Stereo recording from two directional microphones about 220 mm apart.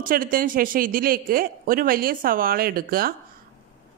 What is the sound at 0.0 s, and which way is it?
Speech, 40° right (ahead or behind).